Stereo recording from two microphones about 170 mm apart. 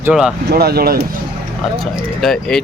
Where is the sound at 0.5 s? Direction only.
65° right (ahead or behind).